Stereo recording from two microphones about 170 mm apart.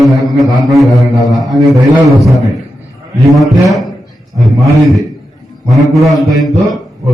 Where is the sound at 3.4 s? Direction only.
Centre (ahead or behind).